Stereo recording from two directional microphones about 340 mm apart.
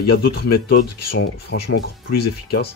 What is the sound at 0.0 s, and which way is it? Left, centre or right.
Speech, left.